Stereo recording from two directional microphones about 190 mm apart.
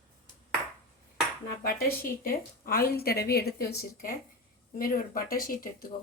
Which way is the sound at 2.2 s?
50° left (ahead or behind).